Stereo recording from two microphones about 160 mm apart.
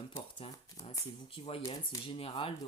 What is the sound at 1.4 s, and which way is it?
Speech, 35° left (ahead or behind).